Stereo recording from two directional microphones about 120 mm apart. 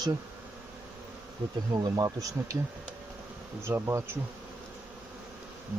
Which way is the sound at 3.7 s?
25° right (ahead or behind).